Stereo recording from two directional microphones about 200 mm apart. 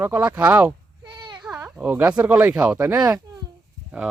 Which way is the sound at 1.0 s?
20° right (ahead or behind).